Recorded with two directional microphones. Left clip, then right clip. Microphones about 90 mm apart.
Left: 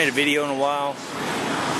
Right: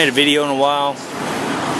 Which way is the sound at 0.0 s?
25° right (ahead or behind).